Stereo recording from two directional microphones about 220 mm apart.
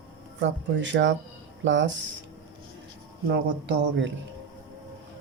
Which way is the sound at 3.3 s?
50° right (ahead or behind).